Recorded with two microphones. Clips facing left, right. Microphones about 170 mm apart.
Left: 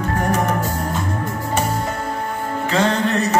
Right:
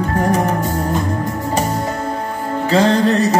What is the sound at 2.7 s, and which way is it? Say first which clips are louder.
Music: right 5 dB; 35° right (ahead or behind).